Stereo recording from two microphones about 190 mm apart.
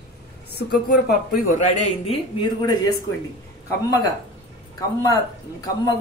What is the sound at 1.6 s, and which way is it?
Speech, 40° left (ahead or behind).